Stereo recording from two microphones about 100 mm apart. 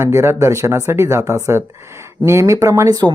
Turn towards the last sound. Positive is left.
turn(degrees=-40)  # may be behind; listen again after turning